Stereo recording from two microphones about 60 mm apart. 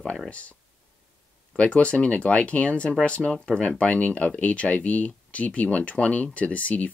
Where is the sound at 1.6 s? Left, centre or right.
Centre.